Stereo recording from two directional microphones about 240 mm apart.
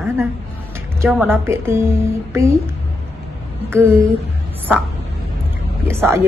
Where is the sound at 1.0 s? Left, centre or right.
Centre.